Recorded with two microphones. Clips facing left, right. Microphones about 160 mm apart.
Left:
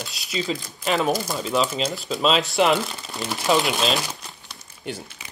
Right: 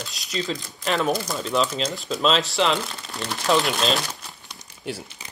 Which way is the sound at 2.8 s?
5° left (ahead or behind).